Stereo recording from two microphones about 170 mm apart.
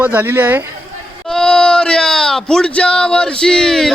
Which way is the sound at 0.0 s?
10° right (ahead or behind).